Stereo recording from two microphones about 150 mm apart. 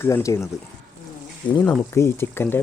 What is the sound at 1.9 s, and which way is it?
Speech, 15° left (ahead or behind).